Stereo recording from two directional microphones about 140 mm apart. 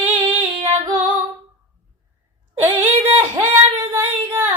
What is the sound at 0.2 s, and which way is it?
Female singing, 35° right (ahead or behind).